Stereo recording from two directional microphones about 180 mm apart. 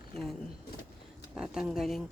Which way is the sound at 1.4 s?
5° right (ahead or behind).